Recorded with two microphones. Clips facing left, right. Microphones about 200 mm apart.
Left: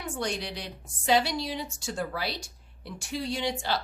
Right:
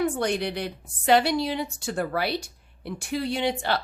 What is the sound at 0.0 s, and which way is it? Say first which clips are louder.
A woman's voice: right 8 dB; 60° right (ahead or behind).